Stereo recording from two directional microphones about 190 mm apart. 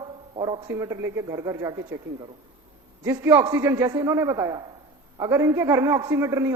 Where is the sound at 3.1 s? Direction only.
15° right (ahead or behind).